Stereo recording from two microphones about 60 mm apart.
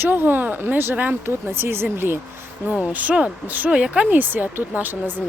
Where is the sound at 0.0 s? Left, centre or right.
Right.